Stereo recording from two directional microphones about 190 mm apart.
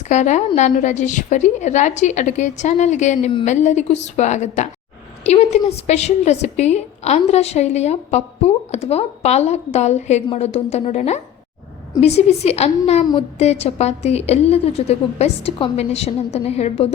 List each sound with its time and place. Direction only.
0.1 s a woman's voice: 40° left (ahead or behind)